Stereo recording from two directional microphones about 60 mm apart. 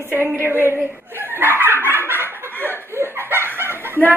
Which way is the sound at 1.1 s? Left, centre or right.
Right.